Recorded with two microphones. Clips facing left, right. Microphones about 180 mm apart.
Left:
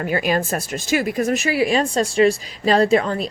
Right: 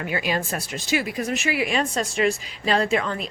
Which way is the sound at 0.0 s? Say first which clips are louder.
Left 5 dB; 45° left (ahead or behind).